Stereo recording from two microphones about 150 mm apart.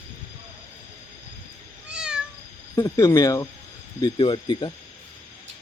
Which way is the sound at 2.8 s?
20° left (ahead or behind).